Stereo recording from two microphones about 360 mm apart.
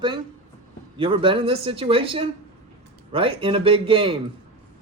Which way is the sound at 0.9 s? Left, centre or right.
Centre.